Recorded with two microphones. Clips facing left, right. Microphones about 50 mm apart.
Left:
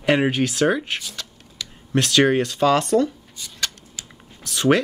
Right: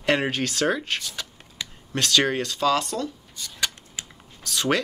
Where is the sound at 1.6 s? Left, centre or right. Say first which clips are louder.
Even; right.